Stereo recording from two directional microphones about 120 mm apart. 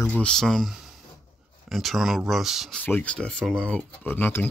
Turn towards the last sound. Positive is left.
turn(degrees=15)  # may be behind; listen again after turning